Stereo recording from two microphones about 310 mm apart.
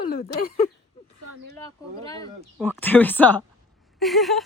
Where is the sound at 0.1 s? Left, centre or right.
Left.